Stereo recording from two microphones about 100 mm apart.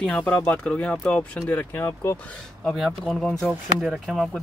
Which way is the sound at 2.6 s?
5° left (ahead or behind).